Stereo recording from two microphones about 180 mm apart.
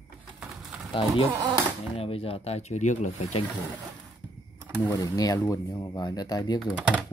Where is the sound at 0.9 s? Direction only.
30° left (ahead or behind).